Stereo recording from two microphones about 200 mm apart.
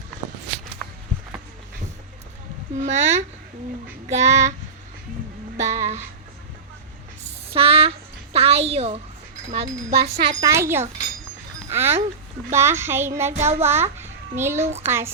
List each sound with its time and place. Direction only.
2.7 s speech: 35° right (ahead or behind)
5.5 s child singing: 35° right (ahead or behind)
7.5 s a sound: 30° right (ahead or behind)
9.9 s speech: 50° right (ahead or behind)
10.4 s music: 15° right (ahead or behind)
13.6 s a child's voice: 10° right (ahead or behind)
14.8 s music: 10° right (ahead or behind)